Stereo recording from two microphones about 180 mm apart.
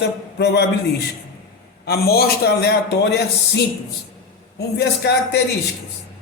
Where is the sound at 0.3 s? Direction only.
70° left (ahead or behind).